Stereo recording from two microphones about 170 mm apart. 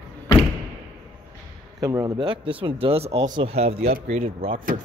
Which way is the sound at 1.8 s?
20° right (ahead or behind).